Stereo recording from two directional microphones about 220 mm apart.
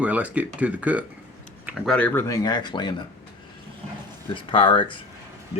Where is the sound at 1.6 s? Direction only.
5° right (ahead or behind).